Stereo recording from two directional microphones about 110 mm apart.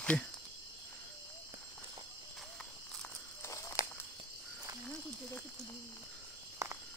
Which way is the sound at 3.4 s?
25° left (ahead or behind).